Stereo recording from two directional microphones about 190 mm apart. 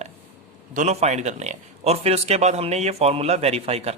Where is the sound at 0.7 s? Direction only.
40° right (ahead or behind).